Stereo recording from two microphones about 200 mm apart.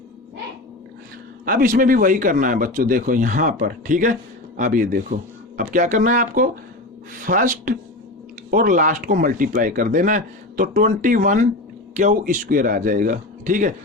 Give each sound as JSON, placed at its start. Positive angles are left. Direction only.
{"t": 1.5, "sound": "speech", "side_deg": -45}